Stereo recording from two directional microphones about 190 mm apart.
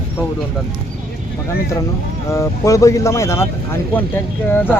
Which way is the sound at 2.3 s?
15° left (ahead or behind).